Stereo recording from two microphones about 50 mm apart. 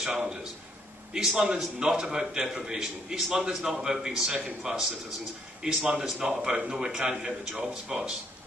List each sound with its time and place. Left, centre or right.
0.0 s a man's voice: centre